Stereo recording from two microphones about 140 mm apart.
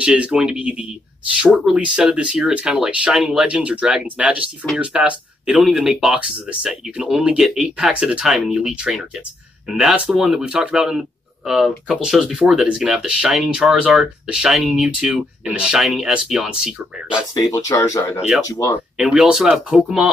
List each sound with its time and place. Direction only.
0.0 s speech: 5° right (ahead or behind)
17.3 s speech: 25° left (ahead or behind)
18.9 s speech: 5° right (ahead or behind)